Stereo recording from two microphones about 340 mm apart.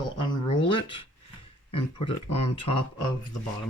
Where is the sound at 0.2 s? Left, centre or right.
Centre.